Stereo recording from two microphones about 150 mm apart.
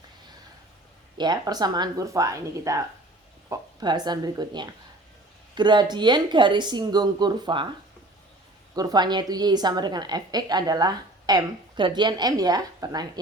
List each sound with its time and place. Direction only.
1.2 s a woman's voice: 25° right (ahead or behind)
8.7 s a woman's voice: 25° right (ahead or behind)